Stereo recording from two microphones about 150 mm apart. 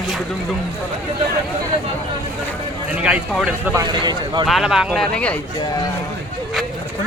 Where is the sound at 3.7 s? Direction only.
25° right (ahead or behind).